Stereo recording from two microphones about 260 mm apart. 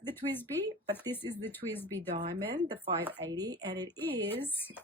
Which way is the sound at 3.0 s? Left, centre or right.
Centre.